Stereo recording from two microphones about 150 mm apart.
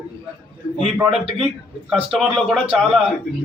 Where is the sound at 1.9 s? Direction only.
5° right (ahead or behind).